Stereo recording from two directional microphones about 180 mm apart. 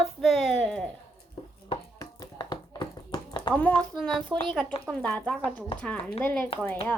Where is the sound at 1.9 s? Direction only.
20° left (ahead or behind).